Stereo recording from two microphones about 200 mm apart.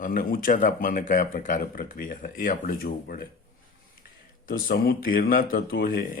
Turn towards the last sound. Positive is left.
turn(degrees=45)  # may be behind; listen again after turning